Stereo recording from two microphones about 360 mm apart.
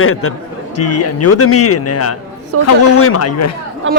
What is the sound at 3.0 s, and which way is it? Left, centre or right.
Speech, left.